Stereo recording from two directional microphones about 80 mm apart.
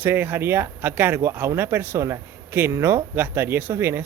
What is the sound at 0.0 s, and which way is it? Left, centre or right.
Speech, right.